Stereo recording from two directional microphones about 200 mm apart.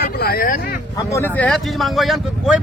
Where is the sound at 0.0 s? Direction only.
50° left (ahead or behind).